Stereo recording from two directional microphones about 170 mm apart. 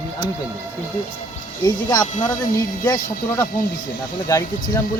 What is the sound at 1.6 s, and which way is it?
Speech, 25° left (ahead or behind).